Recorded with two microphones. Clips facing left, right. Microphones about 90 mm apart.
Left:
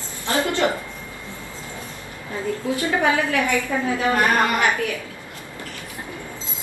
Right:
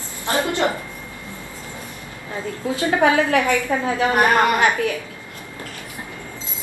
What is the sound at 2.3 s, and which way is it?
A woman's voice, 20° right (ahead or behind).